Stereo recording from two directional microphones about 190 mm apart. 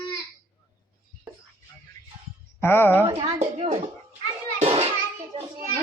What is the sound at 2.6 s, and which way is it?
Speech, 10° left (ahead or behind).